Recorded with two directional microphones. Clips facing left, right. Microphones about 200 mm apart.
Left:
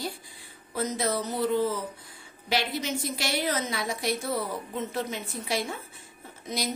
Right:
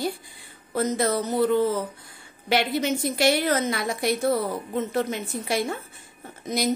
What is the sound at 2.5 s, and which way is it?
A woman's voice, 60° right (ahead or behind).